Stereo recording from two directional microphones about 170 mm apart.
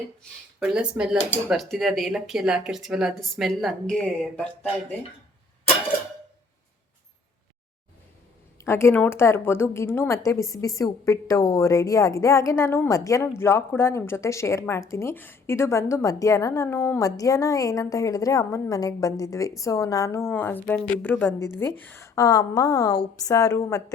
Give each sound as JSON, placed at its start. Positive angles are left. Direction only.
{"t": 0.2, "sound": "speech", "side_deg": -5}
{"t": 8.5, "sound": "a woman's voice", "side_deg": 15}